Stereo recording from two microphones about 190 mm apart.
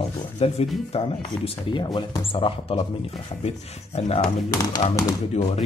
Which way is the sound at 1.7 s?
25° left (ahead or behind).